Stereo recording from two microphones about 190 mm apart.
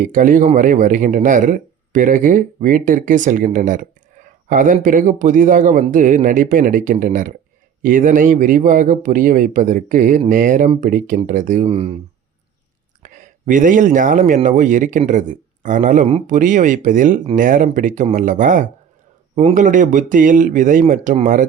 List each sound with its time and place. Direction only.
0.0 s speech: 45° right (ahead or behind)
13.0 s speech: 45° right (ahead or behind)